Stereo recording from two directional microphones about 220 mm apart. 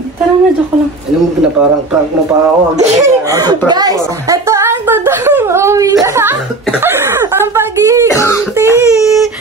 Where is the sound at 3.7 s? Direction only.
15° right (ahead or behind).